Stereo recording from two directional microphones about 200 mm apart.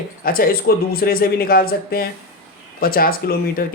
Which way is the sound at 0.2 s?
45° left (ahead or behind).